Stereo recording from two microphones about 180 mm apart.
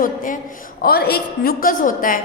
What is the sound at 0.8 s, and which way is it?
A woman's voice, 60° left (ahead or behind).